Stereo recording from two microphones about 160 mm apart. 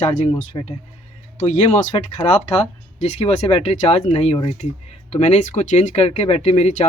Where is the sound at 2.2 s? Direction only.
30° left (ahead or behind).